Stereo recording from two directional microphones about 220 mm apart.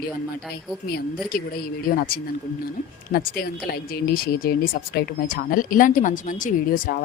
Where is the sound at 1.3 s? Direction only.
40° left (ahead or behind).